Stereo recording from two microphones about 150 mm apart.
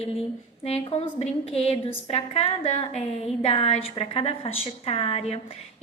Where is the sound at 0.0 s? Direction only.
40° left (ahead or behind).